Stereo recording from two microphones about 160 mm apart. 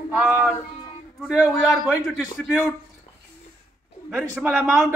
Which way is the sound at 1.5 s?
Centre (ahead or behind).